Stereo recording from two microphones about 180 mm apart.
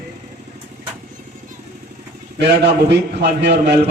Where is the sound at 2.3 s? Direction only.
70° right (ahead or behind).